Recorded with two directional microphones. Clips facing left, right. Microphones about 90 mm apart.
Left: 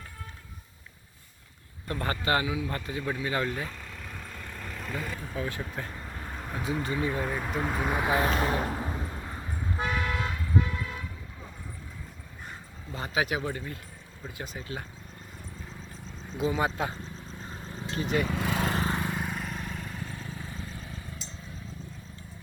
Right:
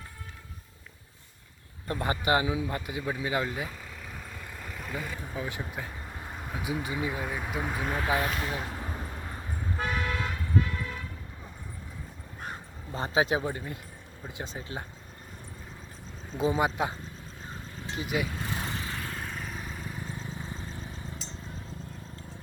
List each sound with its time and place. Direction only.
1.9 s speech: 15° right (ahead or behind)
2.6 s vehicle: 15° right (ahead or behind)
5.2 s speech: 15° right (ahead or behind); by 7.9 s centre (ahead or behind)
7.9 s speech: 15° left (ahead or behind)
8.4 s speech: 45° left (ahead or behind)
9.0 s vehicle: 5° left (ahead or behind)
9.7 s toot: 10° left (ahead or behind)
10.5 s vehicle: 20° left (ahead or behind)
12.9 s speech: 30° right (ahead or behind)
16.6 s speech: 15° right (ahead or behind)
17.9 s speech: 10° right (ahead or behind)
18.3 s lawn mower: 90° left
18.9 s vehicle: 15° left (ahead or behind); by 20.1 s 10° right (ahead or behind)
20.1 s vehicle: 20° right (ahead or behind)